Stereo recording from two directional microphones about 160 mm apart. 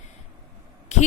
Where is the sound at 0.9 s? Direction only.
45° left (ahead or behind).